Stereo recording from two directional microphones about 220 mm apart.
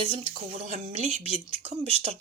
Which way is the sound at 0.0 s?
25° right (ahead or behind).